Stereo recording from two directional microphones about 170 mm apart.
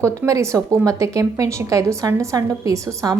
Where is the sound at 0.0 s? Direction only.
20° right (ahead or behind).